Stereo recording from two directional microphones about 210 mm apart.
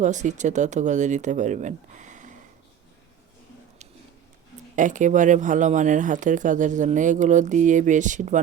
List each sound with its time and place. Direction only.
0.0 s speech: 35° right (ahead or behind)
4.7 s speech: 35° right (ahead or behind)